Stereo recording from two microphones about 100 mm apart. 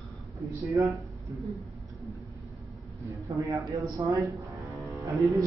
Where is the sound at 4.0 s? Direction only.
40° right (ahead or behind).